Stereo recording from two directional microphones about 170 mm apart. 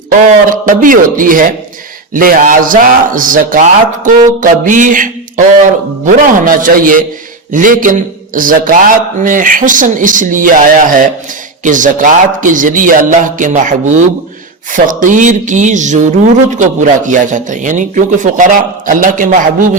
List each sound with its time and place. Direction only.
0.1 s a man's voice: 50° right (ahead or behind)